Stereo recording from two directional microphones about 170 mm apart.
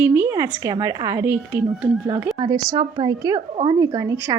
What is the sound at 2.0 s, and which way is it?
A woman's voice, 25° right (ahead or behind).